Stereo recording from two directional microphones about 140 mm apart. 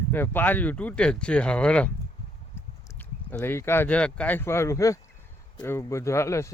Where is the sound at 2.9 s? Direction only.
15° left (ahead or behind).